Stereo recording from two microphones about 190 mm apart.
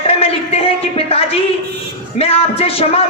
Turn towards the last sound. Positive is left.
turn(degrees=30)  # may be behind; listen again after turning